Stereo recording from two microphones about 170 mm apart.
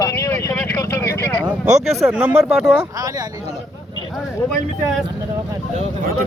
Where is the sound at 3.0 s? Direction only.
20° right (ahead or behind).